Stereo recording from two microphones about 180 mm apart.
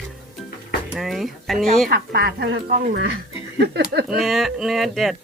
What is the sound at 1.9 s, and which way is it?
Speech, 60° right (ahead or behind).